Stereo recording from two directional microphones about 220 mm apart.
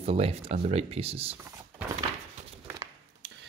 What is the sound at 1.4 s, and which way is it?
Speech, 10° right (ahead or behind).